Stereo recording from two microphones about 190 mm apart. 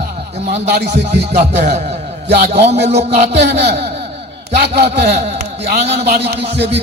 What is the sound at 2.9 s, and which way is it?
Music, 60° right (ahead or behind).